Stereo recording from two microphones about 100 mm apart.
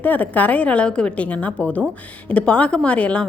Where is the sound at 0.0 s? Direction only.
15° left (ahead or behind).